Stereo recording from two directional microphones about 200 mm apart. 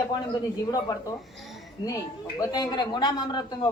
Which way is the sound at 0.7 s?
15° left (ahead or behind).